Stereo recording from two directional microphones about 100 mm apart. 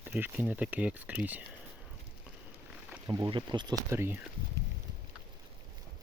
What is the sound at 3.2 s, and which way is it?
Speech, 55° right (ahead or behind).